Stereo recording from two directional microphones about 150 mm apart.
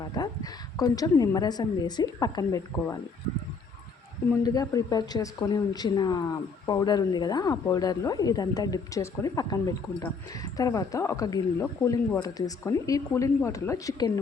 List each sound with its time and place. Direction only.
0.0 s a woman's voice: 25° left (ahead or behind)
4.4 s a woman's voice: 25° left (ahead or behind)